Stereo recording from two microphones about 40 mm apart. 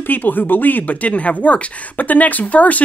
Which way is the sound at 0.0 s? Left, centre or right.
Left.